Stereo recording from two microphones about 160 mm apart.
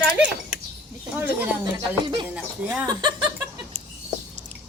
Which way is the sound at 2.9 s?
30° right (ahead or behind).